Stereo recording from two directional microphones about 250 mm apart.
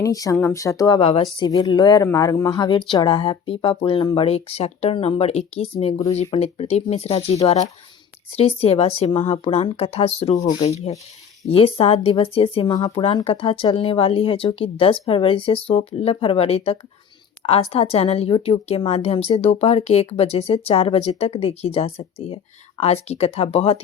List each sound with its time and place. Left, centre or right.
0.0 s a woman's voice: centre